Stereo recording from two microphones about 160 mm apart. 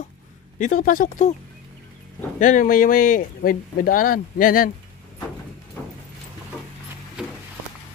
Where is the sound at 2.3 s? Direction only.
50° left (ahead or behind).